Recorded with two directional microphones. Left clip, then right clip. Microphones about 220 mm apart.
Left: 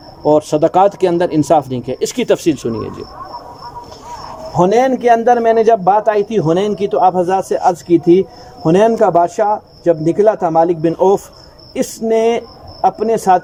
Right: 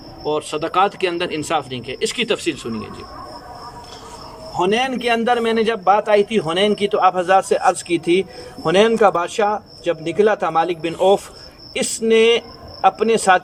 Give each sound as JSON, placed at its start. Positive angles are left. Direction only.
{"t": 0.3, "sound": "speech", "side_deg": 35}
{"t": 4.5, "sound": "a man's voice", "side_deg": 35}